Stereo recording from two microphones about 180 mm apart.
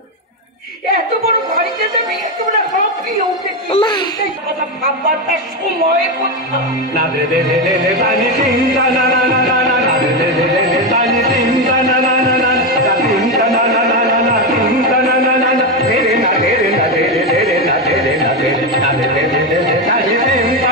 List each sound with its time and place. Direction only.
3.7 s a child's voice: 25° left (ahead or behind)
13.1 s music: centre (ahead or behind)
13.6 s music: 50° right (ahead or behind)
20.2 s music: 50° right (ahead or behind)